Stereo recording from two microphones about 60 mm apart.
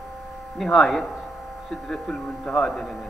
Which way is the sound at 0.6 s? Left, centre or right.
Centre.